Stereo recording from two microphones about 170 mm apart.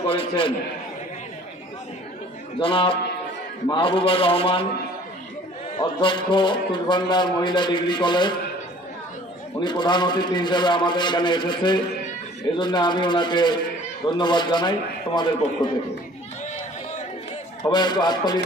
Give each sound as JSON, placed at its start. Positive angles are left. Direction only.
{"t": 0.0, "sound": "a man's voice", "side_deg": 30}
{"t": 2.6, "sound": "a man's voice", "side_deg": 30}
{"t": 5.8, "sound": "a man's voice", "side_deg": 30}
{"t": 9.6, "sound": "a man's voice", "side_deg": 25}
{"t": 17.6, "sound": "a man's voice", "side_deg": 25}